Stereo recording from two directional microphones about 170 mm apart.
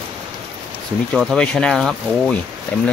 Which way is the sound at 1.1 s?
Centre (ahead or behind).